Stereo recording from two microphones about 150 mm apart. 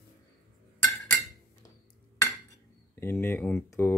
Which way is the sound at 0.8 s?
10° left (ahead or behind).